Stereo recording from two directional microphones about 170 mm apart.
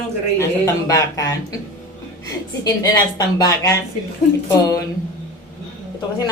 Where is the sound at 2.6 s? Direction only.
20° left (ahead or behind).